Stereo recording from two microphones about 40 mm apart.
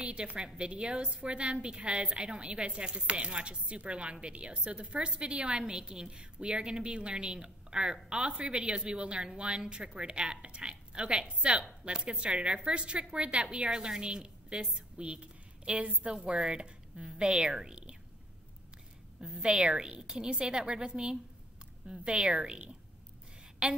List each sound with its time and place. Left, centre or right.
0.0 s a woman's voice: right
19.4 s a woman's voice: right
23.6 s a woman's voice: right